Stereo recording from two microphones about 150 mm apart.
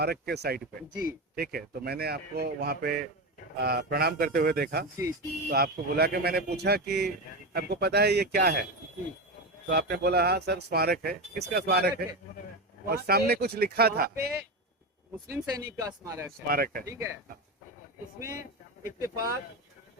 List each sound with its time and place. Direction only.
0.0 s speech: 90° right
9.6 s speech: 90° right
15.3 s speech: 20° right (ahead or behind)
16.5 s speech: 80° right
16.8 s speech: 20° right (ahead or behind)
18.9 s speech: 20° right (ahead or behind)